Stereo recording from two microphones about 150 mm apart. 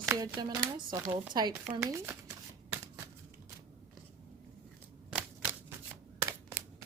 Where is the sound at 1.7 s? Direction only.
15° right (ahead or behind).